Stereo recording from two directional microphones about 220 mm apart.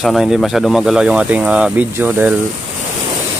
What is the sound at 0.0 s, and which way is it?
Speech, centre (ahead or behind).